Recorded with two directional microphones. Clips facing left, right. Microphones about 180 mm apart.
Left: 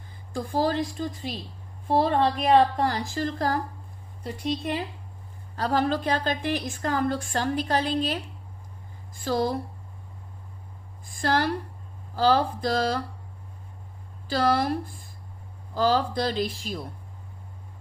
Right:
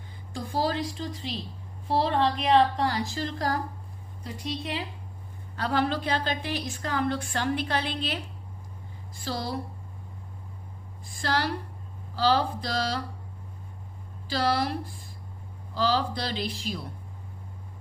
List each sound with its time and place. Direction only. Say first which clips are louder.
0.3 s a woman's voice: left 3 dB; 45° left (ahead or behind)
9.2 s a woman's voice: left 7 dB; 45° left (ahead or behind)
11.2 s a woman's voice: left 4 dB; 50° left (ahead or behind)
14.3 s a woman's voice: left 3 dB; 50° left (ahead or behind)